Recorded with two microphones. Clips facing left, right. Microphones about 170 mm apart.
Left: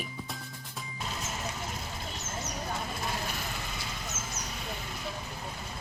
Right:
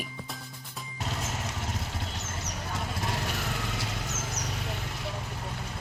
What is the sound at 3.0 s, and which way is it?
Vehicle, 80° right.